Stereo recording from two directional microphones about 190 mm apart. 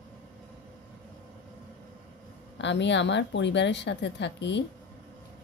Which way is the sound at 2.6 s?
70° left (ahead or behind).